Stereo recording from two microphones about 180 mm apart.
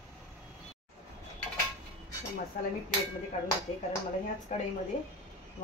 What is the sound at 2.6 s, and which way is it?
Speech, 50° left (ahead or behind).